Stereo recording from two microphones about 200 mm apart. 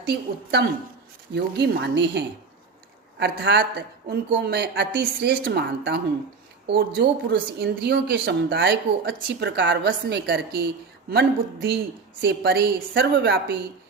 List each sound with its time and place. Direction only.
0.0 s a woman's voice: 55° right (ahead or behind)